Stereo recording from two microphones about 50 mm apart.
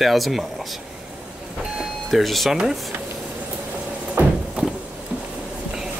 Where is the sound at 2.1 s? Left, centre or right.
Centre.